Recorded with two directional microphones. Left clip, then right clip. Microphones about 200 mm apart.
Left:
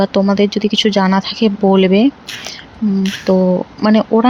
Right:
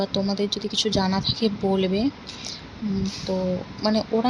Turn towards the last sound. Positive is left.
turn(degrees=30)  # may be behind; listen again after turning